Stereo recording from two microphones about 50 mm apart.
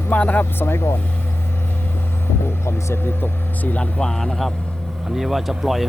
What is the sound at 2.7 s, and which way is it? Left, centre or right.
Speech, left.